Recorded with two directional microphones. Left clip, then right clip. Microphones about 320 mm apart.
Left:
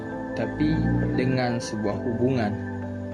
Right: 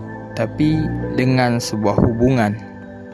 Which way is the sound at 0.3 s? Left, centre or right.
Right.